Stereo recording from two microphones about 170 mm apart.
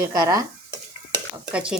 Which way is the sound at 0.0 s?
20° right (ahead or behind).